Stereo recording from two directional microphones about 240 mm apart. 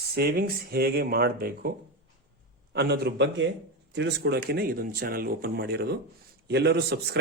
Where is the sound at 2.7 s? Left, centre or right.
Right.